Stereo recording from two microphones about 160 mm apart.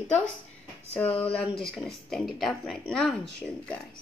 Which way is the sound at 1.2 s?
5° left (ahead or behind).